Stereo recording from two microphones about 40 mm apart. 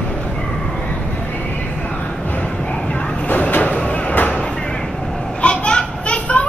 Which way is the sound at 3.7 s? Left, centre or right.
Left.